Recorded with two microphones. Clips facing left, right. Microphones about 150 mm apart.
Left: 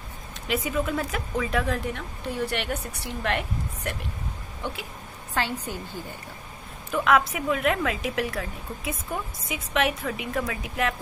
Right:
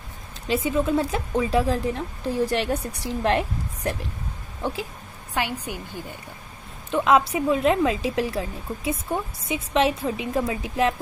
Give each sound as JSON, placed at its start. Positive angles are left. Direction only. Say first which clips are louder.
{"t": 0.5, "sound": "a woman's voice", "louder": "right 4 dB", "side_deg": -25}
{"t": 5.3, "sound": "a woman's voice", "louder": "right 1 dB", "side_deg": -15}
{"t": 6.9, "sound": "a woman's voice", "louder": "right 3 dB", "side_deg": -25}